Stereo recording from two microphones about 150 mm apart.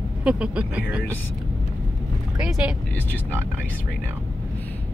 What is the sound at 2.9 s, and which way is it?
Speech, 10° left (ahead or behind).